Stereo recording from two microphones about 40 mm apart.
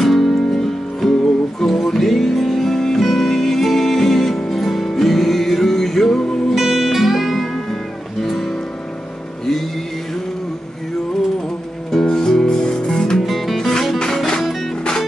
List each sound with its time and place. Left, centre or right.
0.0 s music: centre
6.5 s music: centre
11.9 s music: centre
13.2 s music: centre